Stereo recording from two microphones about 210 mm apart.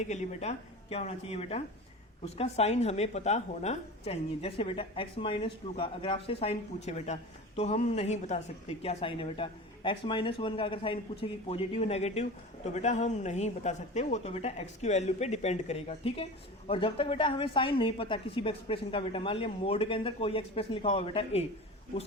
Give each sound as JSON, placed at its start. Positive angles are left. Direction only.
{"t": 0.0, "sound": "a woman's voice", "side_deg": 35}